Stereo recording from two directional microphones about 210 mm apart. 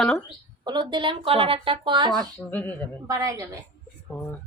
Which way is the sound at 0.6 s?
20° right (ahead or behind).